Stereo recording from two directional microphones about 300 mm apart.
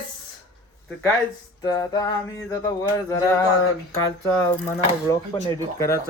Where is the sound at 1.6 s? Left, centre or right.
Centre.